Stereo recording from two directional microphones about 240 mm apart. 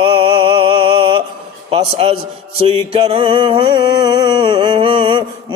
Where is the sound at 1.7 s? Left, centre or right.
Right.